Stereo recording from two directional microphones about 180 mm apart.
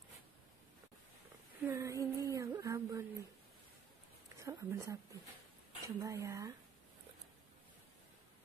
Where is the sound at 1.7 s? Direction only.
15° right (ahead or behind).